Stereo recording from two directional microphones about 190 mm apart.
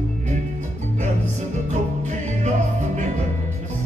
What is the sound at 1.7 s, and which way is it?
Music, 40° right (ahead or behind).